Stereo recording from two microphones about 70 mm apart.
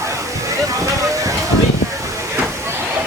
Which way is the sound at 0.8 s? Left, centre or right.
Right.